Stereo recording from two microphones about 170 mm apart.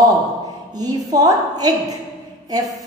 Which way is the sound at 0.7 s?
20° right (ahead or behind).